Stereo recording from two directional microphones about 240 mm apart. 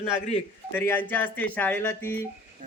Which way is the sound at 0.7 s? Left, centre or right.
Centre.